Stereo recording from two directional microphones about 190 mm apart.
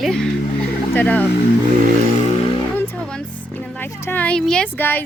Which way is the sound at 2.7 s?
10° left (ahead or behind).